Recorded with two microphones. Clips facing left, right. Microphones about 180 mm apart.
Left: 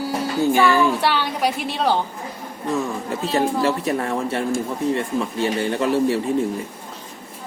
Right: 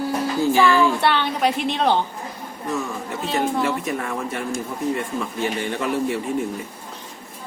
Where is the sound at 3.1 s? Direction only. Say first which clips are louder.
Left 2 dB; 35° left (ahead or behind).